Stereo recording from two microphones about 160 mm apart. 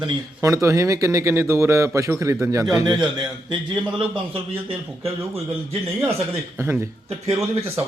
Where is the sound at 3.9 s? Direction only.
30° right (ahead or behind).